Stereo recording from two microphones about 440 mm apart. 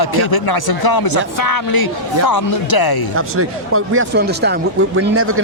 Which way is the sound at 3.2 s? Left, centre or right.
Right.